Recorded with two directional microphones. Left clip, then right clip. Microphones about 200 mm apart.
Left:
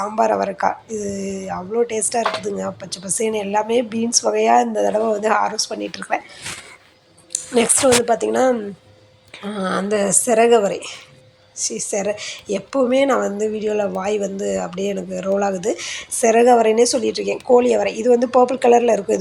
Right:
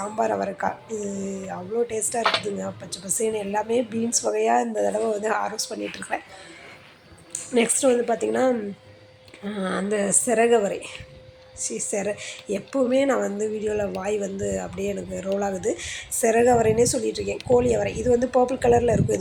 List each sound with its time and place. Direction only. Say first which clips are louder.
0.0 s speech: left 7 dB; 5° left (ahead or behind)
7.5 s speech: left 5 dB; 5° left (ahead or behind)